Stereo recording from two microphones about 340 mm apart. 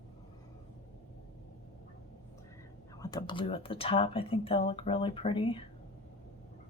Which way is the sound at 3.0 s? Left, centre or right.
Centre.